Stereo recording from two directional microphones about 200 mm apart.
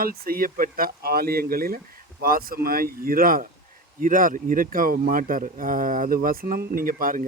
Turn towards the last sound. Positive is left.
turn(degrees=-45)  # may be behind; listen again after turning